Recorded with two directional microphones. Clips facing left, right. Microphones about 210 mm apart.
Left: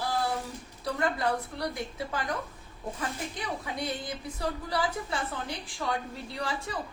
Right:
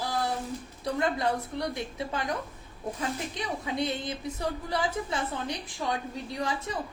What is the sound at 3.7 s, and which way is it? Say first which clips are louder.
A woman's voice: right 4 dB; 25° right (ahead or behind).